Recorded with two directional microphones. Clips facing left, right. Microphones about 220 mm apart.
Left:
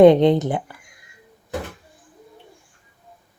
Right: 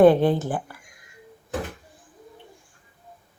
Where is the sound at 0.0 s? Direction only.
20° left (ahead or behind).